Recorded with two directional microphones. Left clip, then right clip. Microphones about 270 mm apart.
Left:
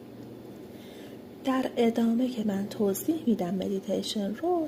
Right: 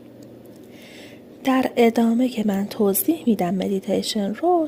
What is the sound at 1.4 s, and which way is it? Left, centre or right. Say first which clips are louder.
A woman's voice: right 9 dB; right.